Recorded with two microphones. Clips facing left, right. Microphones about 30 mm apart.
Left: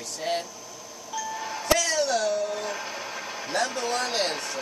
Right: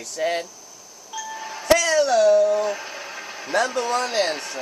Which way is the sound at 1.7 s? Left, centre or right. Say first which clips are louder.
Right 6 dB; right.